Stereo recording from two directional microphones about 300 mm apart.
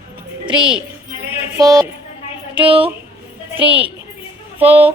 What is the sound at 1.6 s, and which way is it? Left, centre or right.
A woman's voice, centre.